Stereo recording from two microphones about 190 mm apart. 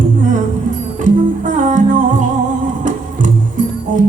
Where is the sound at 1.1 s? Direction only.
45° right (ahead or behind).